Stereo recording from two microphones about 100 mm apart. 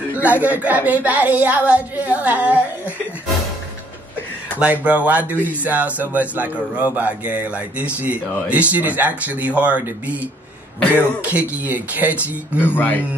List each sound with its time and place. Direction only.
0.2 s speech: 15° right (ahead or behind)
4.6 s speech: 15° right (ahead or behind)
10.8 s speech: 15° left (ahead or behind)
11.2 s speech: 15° right (ahead or behind)
12.6 s speech: 20° left (ahead or behind)